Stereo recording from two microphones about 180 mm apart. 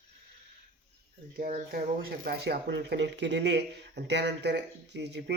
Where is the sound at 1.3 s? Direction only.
50° right (ahead or behind).